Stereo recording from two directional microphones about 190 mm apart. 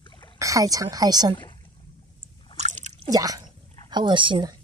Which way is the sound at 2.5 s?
40° right (ahead or behind).